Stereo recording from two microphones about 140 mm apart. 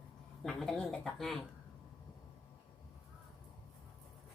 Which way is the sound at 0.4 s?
5° left (ahead or behind).